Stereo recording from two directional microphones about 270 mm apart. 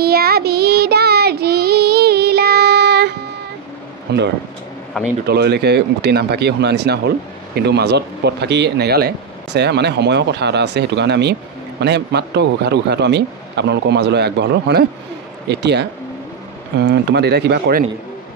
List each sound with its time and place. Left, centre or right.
0.0 s child singing: right
4.1 s speech: right